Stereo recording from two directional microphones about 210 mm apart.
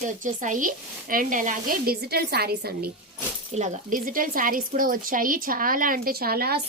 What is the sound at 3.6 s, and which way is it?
Speech, 35° right (ahead or behind).